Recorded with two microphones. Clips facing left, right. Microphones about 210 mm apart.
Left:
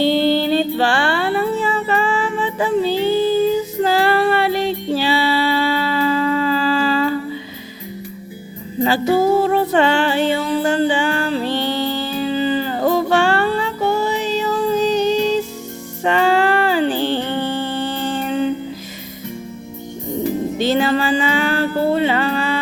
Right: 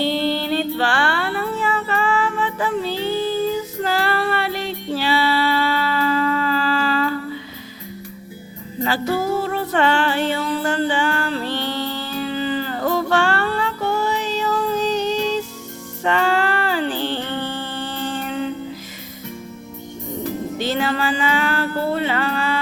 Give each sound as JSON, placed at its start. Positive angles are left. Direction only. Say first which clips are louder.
{"t": 0.2, "sound": "music", "louder": "left 5 dB", "side_deg": 20}
{"t": 8.8, "sound": "music", "louder": "left 6 dB", "side_deg": 15}
{"t": 20.2, "sound": "music", "louder": "left 5 dB", "side_deg": 20}